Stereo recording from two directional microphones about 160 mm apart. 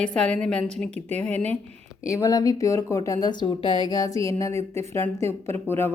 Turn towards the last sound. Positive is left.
turn(degrees=15)  # may be behind; listen again after turning